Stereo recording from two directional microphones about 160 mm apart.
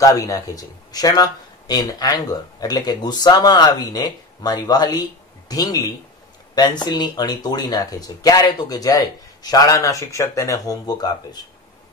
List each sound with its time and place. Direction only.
0.0 s speech: 20° left (ahead or behind)